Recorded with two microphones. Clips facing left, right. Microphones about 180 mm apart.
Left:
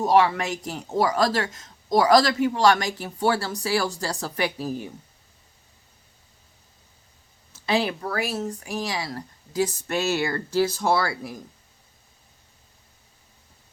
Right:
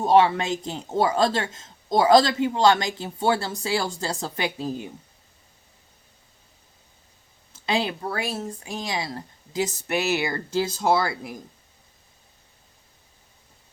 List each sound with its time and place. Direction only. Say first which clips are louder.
0.0 s a man's voice: right 1 dB; 25° right (ahead or behind)
7.6 s a man's voice: left 1 dB; 25° right (ahead or behind)